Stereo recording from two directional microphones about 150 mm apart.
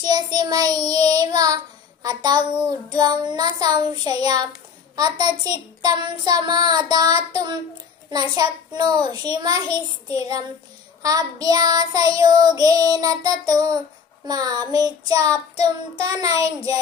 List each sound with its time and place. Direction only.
0.0 s child singing: 25° right (ahead or behind)